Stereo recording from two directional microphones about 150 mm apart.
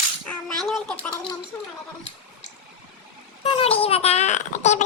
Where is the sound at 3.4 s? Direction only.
40° left (ahead or behind).